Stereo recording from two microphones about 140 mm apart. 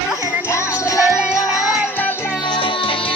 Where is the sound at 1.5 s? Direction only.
Centre (ahead or behind).